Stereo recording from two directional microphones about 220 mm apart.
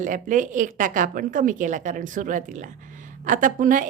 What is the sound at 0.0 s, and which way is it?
A woman's voice, 35° right (ahead or behind).